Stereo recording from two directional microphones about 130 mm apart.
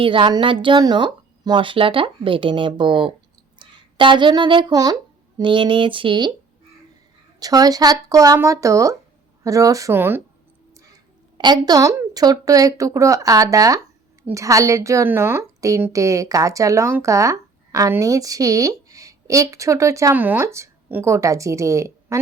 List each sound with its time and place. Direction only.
0.0 s speech: 40° right (ahead or behind)
7.3 s a woman's voice: 30° right (ahead or behind)
11.3 s a woman's voice: 35° right (ahead or behind)